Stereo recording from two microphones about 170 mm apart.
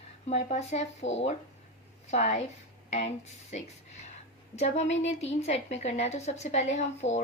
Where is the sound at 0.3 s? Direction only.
40° left (ahead or behind).